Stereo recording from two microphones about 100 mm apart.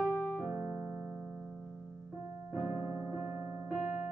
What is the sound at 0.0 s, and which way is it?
Piano, 10° left (ahead or behind).